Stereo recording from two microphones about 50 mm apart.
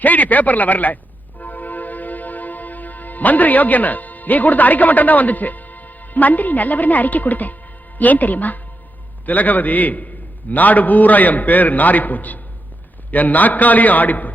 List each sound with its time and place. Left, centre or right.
0.0 s speech: left
1.4 s music: left
7.9 s a man's voice: left